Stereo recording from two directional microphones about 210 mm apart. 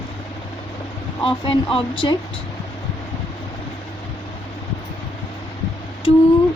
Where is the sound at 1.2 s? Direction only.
25° left (ahead or behind).